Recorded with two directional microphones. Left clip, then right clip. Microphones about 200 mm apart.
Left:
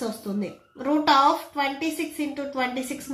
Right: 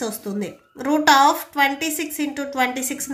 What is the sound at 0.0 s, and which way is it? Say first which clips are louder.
A woman's voice: right 3 dB; 40° right (ahead or behind).